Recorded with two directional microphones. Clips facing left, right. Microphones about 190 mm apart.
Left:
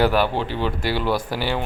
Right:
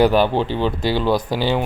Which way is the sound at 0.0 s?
20° right (ahead or behind).